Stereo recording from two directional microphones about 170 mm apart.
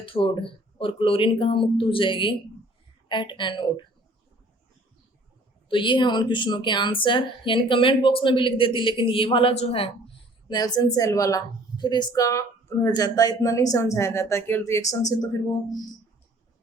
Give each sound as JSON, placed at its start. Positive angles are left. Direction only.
{"t": 0.0, "sound": "a woman's voice", "side_deg": 30}
{"t": 5.6, "sound": "a woman's voice", "side_deg": 30}
{"t": 10.5, "sound": "a woman's voice", "side_deg": 20}